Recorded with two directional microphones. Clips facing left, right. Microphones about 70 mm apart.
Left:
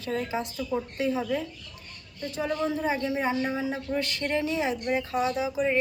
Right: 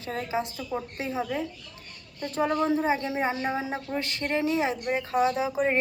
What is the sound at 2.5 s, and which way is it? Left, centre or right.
A woman's voice, right.